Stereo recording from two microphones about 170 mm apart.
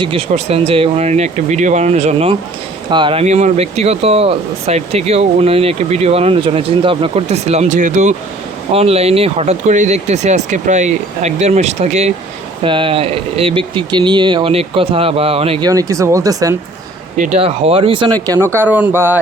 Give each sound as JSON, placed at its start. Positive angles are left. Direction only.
{"t": 0.0, "sound": "speech", "side_deg": -35}
{"t": 2.9, "sound": "speech", "side_deg": -30}
{"t": 8.7, "sound": "speech", "side_deg": -35}
{"t": 12.6, "sound": "speech", "side_deg": -30}
{"t": 15.6, "sound": "speech", "side_deg": -20}
{"t": 17.2, "sound": "speech", "side_deg": -35}
{"t": 18.3, "sound": "speech", "side_deg": -15}